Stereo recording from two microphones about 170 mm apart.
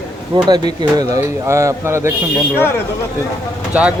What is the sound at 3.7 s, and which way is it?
Speech, 10° right (ahead or behind).